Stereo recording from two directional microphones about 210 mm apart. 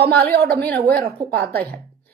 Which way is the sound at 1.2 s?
50° right (ahead or behind).